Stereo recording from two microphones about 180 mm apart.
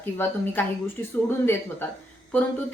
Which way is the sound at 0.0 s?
10° left (ahead or behind).